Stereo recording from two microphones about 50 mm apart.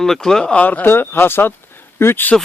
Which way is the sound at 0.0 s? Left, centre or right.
Centre.